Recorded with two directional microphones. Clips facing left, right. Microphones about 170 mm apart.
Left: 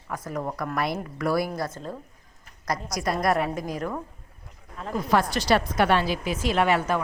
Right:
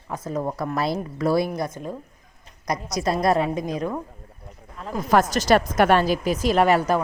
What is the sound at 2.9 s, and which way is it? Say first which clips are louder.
Speech: right 4 dB; 25° right (ahead or behind).